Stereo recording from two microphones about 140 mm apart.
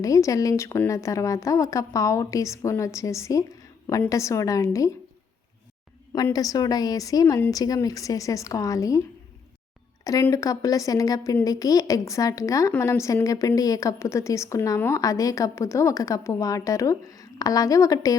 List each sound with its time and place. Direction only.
0.0 s a woman's voice: 25° left (ahead or behind)
6.3 s a woman's voice: 25° left (ahead or behind)
10.0 s a woman's voice: 25° left (ahead or behind)